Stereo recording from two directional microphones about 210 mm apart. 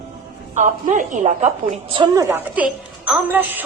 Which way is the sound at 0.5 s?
40° right (ahead or behind).